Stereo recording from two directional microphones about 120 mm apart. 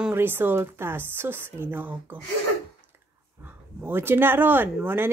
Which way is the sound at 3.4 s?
15° right (ahead or behind).